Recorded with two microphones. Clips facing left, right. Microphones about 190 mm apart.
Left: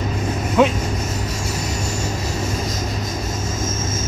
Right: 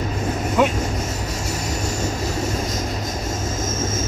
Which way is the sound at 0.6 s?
Centre (ahead or behind).